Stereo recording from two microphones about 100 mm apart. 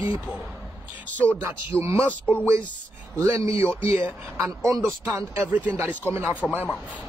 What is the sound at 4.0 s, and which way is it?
Music, 15° right (ahead or behind).